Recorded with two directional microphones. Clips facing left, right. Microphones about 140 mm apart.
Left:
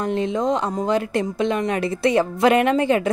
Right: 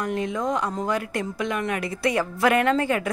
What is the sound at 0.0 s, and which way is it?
A woman's voice, 25° left (ahead or behind).